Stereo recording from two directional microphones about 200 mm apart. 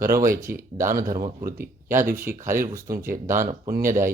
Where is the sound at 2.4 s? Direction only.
40° right (ahead or behind).